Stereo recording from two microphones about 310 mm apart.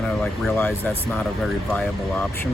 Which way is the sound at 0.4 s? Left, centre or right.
Centre.